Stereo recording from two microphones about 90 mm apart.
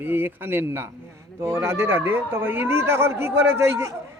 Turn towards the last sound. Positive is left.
turn(degrees=-30)  # may be behind; listen again after turning